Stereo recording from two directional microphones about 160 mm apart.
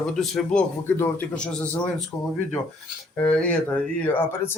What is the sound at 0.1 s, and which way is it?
A man's voice, centre (ahead or behind).